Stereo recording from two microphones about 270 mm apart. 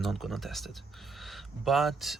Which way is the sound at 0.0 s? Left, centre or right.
Centre.